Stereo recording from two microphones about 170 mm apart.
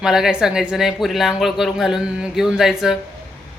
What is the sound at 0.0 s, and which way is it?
Speech, 5° right (ahead or behind).